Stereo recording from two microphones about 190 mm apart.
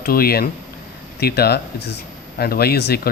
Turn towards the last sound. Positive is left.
turn(degrees=55)  # may be behind; listen again after turning